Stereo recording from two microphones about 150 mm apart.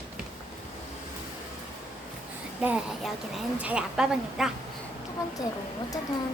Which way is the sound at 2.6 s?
5° right (ahead or behind).